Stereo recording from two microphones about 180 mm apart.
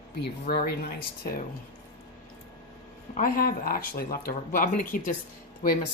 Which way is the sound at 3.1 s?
50° left (ahead or behind).